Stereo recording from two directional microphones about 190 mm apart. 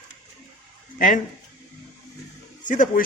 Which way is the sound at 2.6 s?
45° left (ahead or behind).